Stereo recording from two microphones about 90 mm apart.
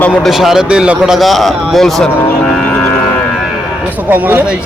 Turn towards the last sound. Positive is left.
turn(degrees=-20)  # may be behind; listen again after turning